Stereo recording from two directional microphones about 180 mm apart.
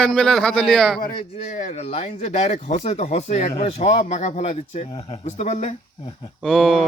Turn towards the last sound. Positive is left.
turn(degrees=0)  # may be behind; listen again after turning